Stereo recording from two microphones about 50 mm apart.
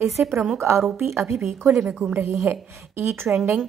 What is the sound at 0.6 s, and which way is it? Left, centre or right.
Speech, right.